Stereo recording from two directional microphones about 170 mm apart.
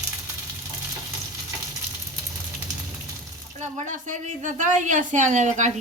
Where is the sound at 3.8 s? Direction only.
45° right (ahead or behind).